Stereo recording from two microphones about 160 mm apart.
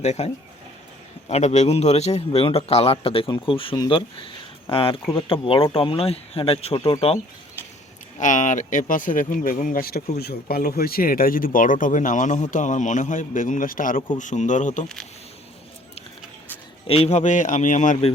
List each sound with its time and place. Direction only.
0.0 s a man's voice: 40° left (ahead or behind)
1.3 s speech: 45° left (ahead or behind)
8.2 s speech: 50° left (ahead or behind)
10.2 s a man's voice: 75° left (ahead or behind); by 14.8 s 50° left (ahead or behind)
16.8 s a man's voice: 35° left (ahead or behind)